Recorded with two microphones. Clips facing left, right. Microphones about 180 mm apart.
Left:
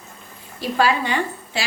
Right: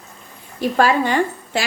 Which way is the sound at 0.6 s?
45° right (ahead or behind).